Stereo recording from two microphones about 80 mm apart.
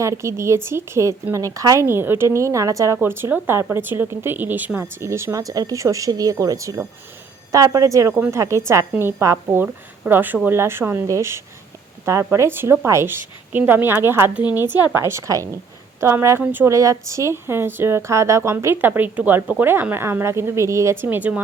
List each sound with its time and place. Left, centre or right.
0.0 s a woman's voice: right
1.9 s a woman's voice: right
3.0 s a woman's voice: right
8.9 s a woman's voice: right
16.4 s a woman's voice: right
16.6 s a woman's voice: right